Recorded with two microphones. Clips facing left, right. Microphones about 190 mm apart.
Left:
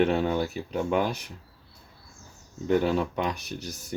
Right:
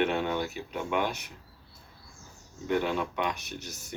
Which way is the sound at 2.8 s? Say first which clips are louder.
Left 4 dB; 35° left (ahead or behind).